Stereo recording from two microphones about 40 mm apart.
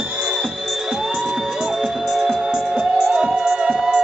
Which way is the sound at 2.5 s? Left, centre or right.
Right.